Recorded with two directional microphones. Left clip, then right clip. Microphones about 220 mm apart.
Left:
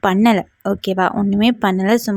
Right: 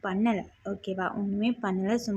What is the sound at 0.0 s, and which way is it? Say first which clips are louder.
A woman's voice: left 14 dB; 45° left (ahead or behind).